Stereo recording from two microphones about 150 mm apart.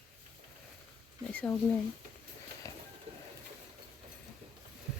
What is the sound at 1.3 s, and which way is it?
Speech, 10° left (ahead or behind).